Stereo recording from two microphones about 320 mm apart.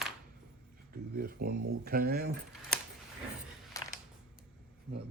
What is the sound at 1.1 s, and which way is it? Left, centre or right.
Speech, right.